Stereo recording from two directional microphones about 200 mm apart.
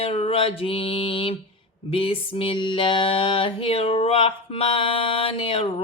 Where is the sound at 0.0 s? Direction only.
30° left (ahead or behind).